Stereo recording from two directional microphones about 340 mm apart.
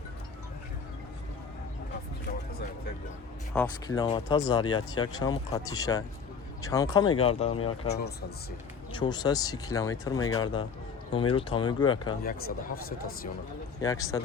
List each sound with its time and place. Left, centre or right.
3.5 s speech: centre
7.9 s speech: left
8.9 s speech: centre
12.2 s speech: left
13.8 s speech: centre